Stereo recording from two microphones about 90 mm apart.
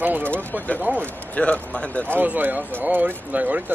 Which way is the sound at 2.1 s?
20° right (ahead or behind).